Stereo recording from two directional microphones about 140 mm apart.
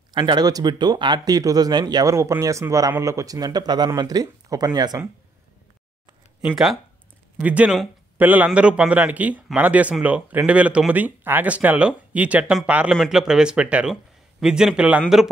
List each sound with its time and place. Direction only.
0.1 s speech: 35° right (ahead or behind)
6.4 s speech: centre (ahead or behind)